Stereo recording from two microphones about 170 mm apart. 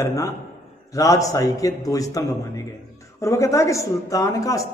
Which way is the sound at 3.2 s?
20° left (ahead or behind).